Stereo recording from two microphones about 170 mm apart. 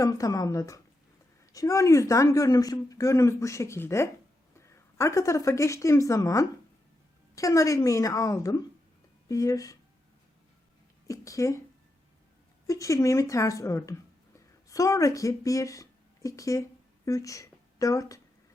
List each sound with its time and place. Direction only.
0.0 s a woman's voice: 20° left (ahead or behind)
11.1 s a woman's voice: 20° left (ahead or behind)
12.6 s a woman's voice: 20° left (ahead or behind)